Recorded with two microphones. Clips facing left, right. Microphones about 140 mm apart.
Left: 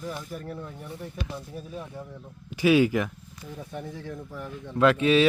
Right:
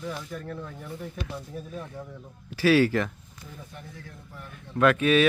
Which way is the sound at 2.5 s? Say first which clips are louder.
Even; 15° left (ahead or behind).